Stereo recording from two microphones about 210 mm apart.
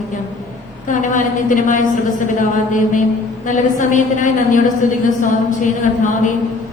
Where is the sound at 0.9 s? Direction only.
40° left (ahead or behind).